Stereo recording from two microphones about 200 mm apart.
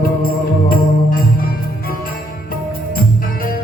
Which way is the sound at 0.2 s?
45° left (ahead or behind).